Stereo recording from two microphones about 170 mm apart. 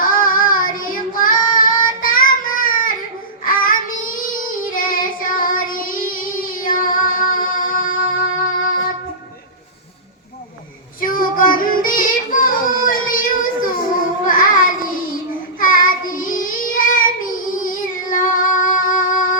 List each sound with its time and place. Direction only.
0.0 s child singing: 55° left (ahead or behind)
11.0 s music: 55° left (ahead or behind)
14.3 s child singing: 55° left (ahead or behind)